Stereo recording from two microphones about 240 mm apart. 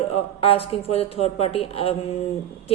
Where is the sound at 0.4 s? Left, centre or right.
Left.